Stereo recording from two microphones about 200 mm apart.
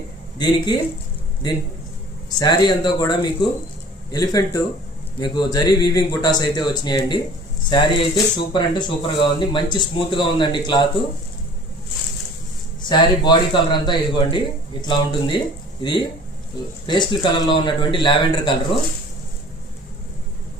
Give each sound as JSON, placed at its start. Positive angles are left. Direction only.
{"t": 0.3, "sound": "a man's voice", "side_deg": 20}
{"t": 2.4, "sound": "a man's voice", "side_deg": 20}
{"t": 12.9, "sound": "a man's voice", "side_deg": 20}